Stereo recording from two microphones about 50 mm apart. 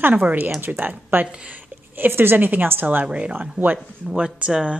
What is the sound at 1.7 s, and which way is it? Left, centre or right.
Speech, right.